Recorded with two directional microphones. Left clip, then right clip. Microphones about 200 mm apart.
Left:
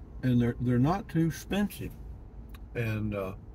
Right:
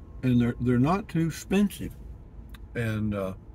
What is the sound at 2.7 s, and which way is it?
Speech, 20° right (ahead or behind).